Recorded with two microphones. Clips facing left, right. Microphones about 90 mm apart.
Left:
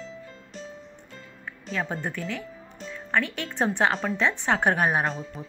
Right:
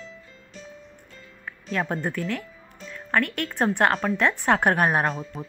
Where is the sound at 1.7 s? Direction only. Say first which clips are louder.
Right 3 dB; centre (ahead or behind).